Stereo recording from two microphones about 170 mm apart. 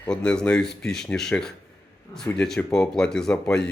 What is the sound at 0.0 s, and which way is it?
A man's voice, 5° left (ahead or behind).